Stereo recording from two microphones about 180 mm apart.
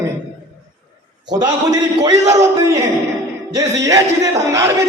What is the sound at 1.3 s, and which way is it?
A man's voice, 20° right (ahead or behind).